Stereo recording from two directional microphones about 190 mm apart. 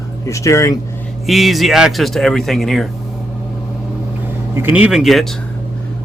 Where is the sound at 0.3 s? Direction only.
15° left (ahead or behind).